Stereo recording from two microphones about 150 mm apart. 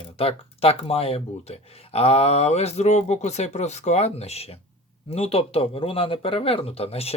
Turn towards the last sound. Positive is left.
turn(degrees=45)  # may be behind; listen again after turning